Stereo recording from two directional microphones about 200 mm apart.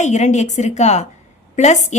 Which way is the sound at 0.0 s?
35° left (ahead or behind).